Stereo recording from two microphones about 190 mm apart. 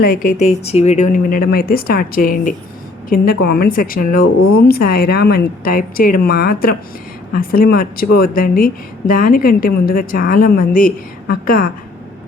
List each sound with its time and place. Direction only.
0.0 s speech: 45° left (ahead or behind)
3.1 s speech: 55° left (ahead or behind)